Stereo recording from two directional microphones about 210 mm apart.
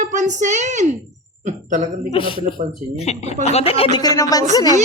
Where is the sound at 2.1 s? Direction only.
25° left (ahead or behind).